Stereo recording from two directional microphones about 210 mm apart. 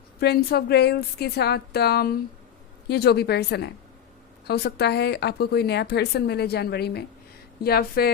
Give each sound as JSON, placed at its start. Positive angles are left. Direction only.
{"t": 0.2, "sound": "speech", "side_deg": 50}